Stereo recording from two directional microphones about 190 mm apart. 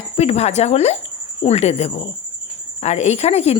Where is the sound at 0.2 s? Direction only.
35° left (ahead or behind).